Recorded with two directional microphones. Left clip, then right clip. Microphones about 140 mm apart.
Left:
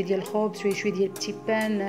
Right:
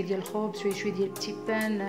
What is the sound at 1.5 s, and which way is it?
Speech, 25° left (ahead or behind).